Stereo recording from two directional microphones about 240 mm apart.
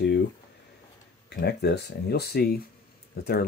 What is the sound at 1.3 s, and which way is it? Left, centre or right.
Speech, left.